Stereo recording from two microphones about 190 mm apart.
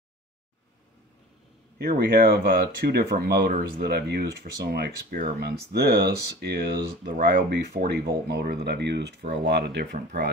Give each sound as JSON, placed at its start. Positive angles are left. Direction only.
{"t": 1.8, "sound": "speech", "side_deg": -50}